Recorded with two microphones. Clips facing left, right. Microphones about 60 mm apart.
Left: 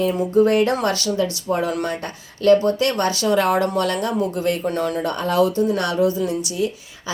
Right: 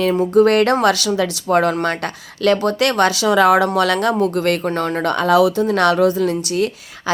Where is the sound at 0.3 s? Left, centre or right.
Right.